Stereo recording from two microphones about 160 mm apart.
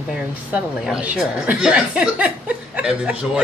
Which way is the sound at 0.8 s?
5° right (ahead or behind).